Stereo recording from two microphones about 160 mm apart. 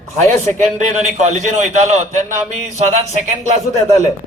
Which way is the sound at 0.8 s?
45° right (ahead or behind).